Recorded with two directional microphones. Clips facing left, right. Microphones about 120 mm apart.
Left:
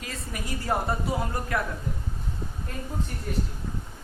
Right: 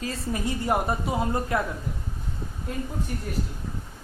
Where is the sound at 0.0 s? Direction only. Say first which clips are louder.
Right 7 dB; 25° right (ahead or behind).